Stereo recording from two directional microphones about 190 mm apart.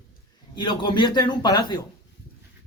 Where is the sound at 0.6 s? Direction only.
25° left (ahead or behind).